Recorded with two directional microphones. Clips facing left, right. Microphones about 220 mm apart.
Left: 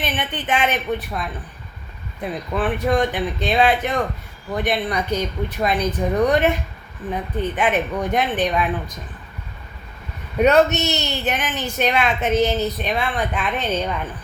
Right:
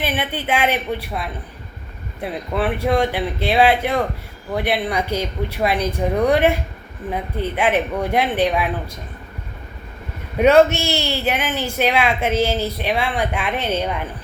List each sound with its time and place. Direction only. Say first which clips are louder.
0.0 s speech: right 3 dB; 10° right (ahead or behind)
10.3 s speech: right 2 dB; 10° right (ahead or behind)